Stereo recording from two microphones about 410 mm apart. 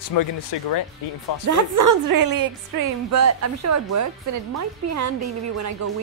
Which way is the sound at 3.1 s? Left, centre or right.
Right.